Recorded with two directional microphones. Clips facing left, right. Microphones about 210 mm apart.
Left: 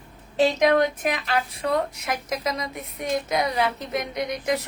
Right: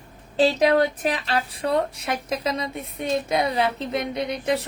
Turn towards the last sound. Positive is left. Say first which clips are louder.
# right 1 dB
turn(degrees=-30)  # may be behind; listen again after turning